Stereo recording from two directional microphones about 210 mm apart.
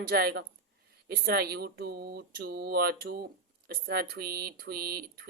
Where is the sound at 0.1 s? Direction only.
50° right (ahead or behind).